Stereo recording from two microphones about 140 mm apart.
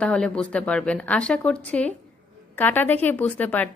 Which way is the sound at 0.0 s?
5° left (ahead or behind).